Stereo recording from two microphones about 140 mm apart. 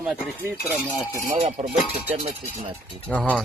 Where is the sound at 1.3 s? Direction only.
70° right (ahead or behind).